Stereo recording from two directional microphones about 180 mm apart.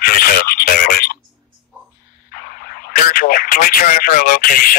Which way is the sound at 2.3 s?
55° left (ahead or behind).